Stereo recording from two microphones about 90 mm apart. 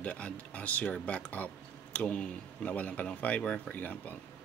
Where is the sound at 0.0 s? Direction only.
15° left (ahead or behind).